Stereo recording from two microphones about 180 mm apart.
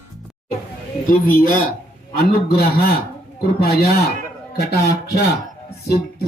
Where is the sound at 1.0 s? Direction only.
50° left (ahead or behind).